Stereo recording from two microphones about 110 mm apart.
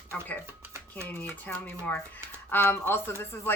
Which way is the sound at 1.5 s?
15° left (ahead or behind).